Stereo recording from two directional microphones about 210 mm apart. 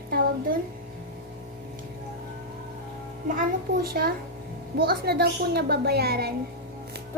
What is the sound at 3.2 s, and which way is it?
A woman's voice, 45° right (ahead or behind).